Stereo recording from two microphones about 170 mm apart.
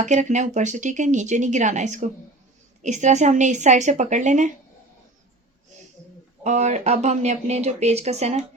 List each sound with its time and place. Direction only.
0.0 s speech: 45° right (ahead or behind)
6.4 s speech: 45° right (ahead or behind)